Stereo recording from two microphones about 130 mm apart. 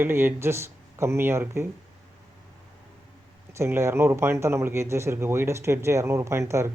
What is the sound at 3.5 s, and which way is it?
Speech, 20° right (ahead or behind).